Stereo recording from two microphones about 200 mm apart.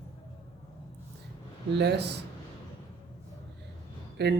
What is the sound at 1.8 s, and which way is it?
Speech, 55° right (ahead or behind).